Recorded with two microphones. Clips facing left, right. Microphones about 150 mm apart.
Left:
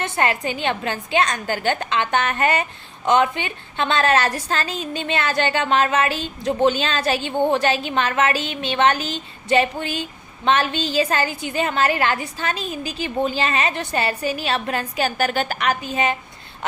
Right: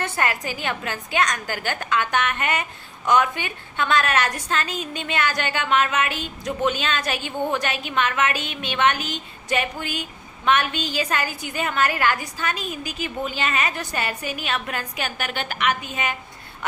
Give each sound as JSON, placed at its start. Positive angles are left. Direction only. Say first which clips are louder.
{"t": 0.0, "sound": "a woman's voice", "louder": "left 3 dB", "side_deg": 25}